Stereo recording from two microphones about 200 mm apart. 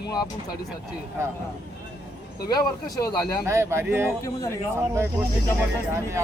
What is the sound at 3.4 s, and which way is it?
Speech, 15° right (ahead or behind).